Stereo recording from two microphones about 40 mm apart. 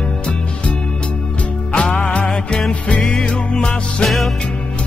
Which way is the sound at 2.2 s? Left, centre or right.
Centre.